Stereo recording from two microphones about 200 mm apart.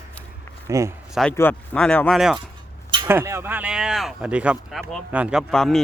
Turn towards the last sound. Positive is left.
turn(degrees=0)  # may be behind; listen again after turning